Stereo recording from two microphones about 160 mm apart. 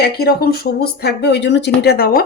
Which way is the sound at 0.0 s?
80° left.